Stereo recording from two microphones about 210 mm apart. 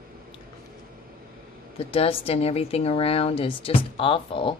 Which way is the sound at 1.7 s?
25° left (ahead or behind).